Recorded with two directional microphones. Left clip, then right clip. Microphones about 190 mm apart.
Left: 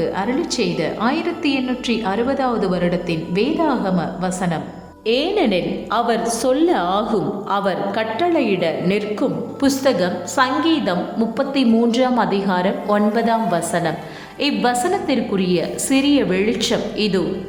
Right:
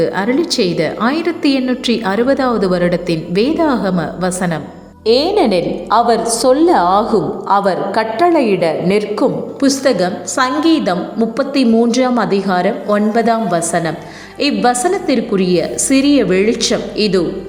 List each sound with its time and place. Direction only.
0.0 s a woman's voice: 20° right (ahead or behind)
5.0 s a woman's voice: 10° left (ahead or behind)
7.1 s a woman's voice: 10° right (ahead or behind)